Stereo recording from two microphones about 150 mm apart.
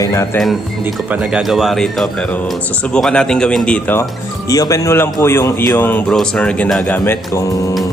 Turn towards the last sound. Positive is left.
turn(degrees=20)  # may be behind; listen again after turning